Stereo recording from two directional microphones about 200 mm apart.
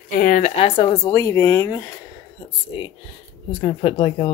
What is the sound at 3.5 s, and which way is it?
Speech, 25° left (ahead or behind).